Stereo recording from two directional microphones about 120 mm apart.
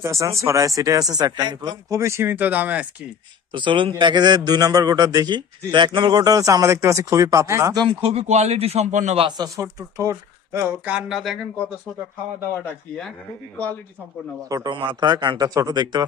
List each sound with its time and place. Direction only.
0.0 s speech: 25° right (ahead or behind)
3.5 s a man's voice: 45° right (ahead or behind); by 7.8 s 25° right (ahead or behind)
7.8 s speech: 50° right (ahead or behind); by 9.2 s 70° right (ahead or behind)
9.4 s speech: 25° right (ahead or behind)
10.9 s speech: 5° right (ahead or behind)
14.5 s a man's voice: 35° right (ahead or behind)